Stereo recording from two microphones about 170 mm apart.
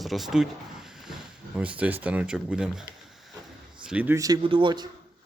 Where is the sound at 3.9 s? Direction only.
10° right (ahead or behind).